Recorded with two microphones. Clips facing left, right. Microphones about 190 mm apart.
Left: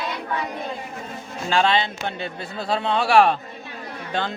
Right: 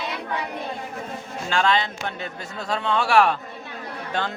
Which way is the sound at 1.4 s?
35° left (ahead or behind).